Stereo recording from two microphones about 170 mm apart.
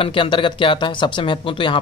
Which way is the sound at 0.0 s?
30° left (ahead or behind).